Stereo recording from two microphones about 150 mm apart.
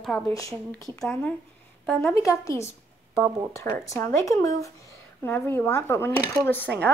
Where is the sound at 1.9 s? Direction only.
15° left (ahead or behind).